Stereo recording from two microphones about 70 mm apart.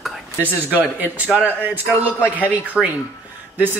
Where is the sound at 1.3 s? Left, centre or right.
Centre.